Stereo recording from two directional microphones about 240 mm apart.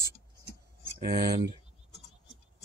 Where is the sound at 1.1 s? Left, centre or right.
Right.